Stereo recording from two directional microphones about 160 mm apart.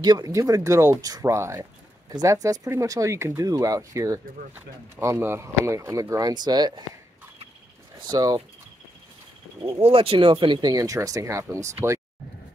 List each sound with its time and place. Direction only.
0.0 s speech: 25° right (ahead or behind)
8.1 s speech: 25° right (ahead or behind)
9.8 s speech: 35° right (ahead or behind); by 12.0 s 20° right (ahead or behind)